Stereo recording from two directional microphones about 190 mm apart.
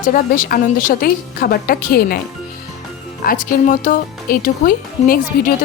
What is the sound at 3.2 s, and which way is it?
Speech, 45° left (ahead or behind).